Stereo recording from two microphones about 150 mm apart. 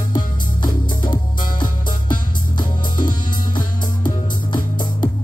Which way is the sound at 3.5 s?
65° left (ahead or behind).